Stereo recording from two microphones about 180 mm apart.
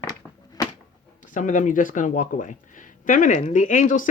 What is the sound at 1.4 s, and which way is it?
A woman's voice, 45° left (ahead or behind).